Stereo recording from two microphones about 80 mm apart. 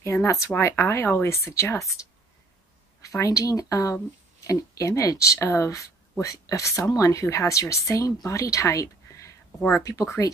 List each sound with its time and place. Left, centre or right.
0.0 s speech: left
3.0 s speech: left